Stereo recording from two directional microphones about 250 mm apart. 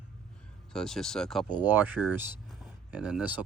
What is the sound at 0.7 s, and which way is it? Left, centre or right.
Speech, centre.